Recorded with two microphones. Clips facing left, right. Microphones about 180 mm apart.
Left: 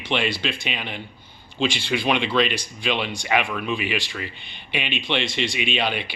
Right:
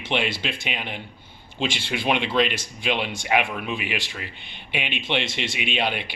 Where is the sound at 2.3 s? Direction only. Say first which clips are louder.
Left 1 dB; 20° right (ahead or behind).